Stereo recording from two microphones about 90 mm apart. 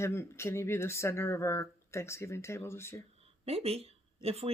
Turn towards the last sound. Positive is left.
turn(degrees=-90)